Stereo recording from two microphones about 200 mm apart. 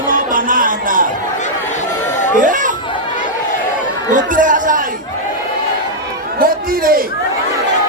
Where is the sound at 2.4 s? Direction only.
40° right (ahead or behind).